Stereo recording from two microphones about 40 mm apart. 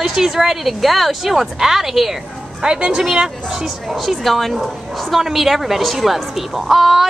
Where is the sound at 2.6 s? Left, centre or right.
Right.